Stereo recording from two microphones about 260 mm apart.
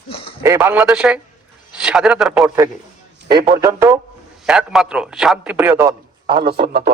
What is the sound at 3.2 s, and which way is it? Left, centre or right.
A man's voice, centre.